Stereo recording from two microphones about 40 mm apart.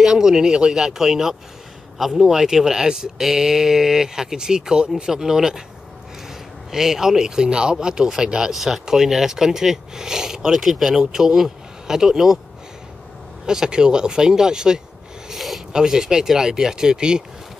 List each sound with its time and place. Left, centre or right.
0.0 s speech: centre
5.1 s speech: centre
6.7 s speech: centre
13.5 s speech: centre
15.2 s a sound: centre
15.7 s speech: centre